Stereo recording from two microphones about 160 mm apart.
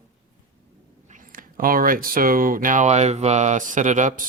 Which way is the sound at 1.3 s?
60° right (ahead or behind).